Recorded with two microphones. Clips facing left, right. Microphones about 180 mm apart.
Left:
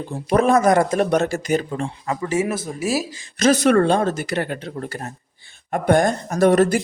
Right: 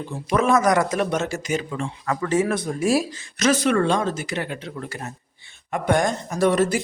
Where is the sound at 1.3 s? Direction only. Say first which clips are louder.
Left 4 dB; 55° left (ahead or behind).